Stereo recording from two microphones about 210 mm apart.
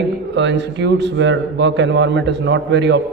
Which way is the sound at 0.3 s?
55° right (ahead or behind).